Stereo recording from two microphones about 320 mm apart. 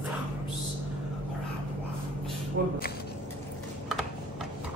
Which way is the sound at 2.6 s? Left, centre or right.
Right.